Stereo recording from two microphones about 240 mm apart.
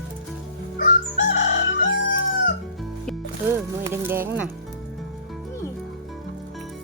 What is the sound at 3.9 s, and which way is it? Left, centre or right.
Speech, centre.